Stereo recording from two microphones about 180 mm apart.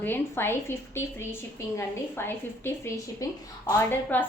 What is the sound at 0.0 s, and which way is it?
A woman's voice, 10° left (ahead or behind).